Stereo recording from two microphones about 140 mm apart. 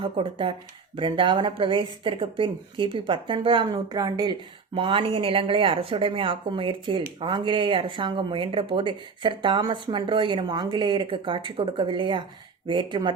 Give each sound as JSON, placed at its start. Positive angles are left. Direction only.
{"t": 0.0, "sound": "speech", "side_deg": -35}
{"t": 4.7, "sound": "speech", "side_deg": -40}